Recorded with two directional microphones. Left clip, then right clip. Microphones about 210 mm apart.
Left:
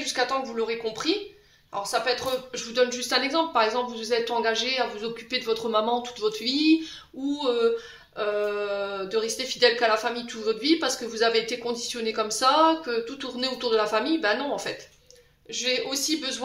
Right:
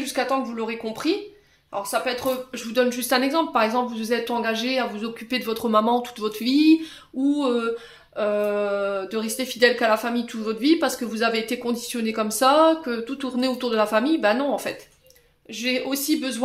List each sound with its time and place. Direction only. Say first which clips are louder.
0.0 s speech: right 2 dB; 50° right (ahead or behind)